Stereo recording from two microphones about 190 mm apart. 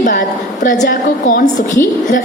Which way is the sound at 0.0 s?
40° left (ahead or behind).